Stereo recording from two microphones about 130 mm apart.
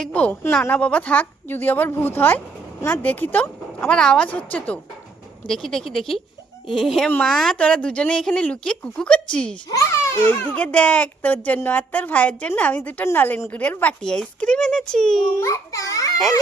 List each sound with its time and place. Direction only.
0.0 s a woman's voice: 10° left (ahead or behind)
9.6 s a child's voice: 20° left (ahead or behind)
10.5 s a woman's voice: 10° left (ahead or behind)
15.4 s a child's voice: 25° left (ahead or behind)